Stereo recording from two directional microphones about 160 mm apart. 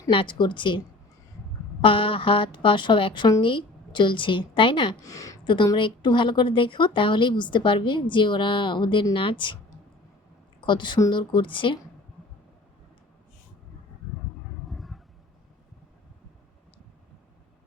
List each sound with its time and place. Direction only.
0.1 s speech: 30° left (ahead or behind)
1.8 s a woman's voice: 30° left (ahead or behind)
14.7 s roaring cats: centre (ahead or behind)